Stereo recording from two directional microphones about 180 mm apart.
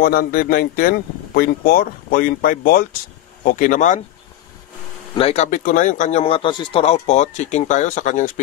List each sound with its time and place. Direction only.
0.0 s speech: 55° left (ahead or behind)
5.1 s speech: 35° left (ahead or behind)